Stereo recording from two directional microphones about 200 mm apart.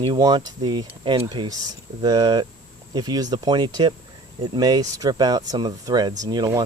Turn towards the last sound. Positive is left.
turn(degrees=-20)  # may be behind; listen again after turning